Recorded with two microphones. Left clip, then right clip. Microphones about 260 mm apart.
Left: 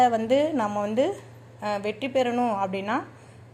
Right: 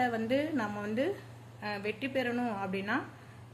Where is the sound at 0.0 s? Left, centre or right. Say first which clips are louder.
Left 10 dB; left.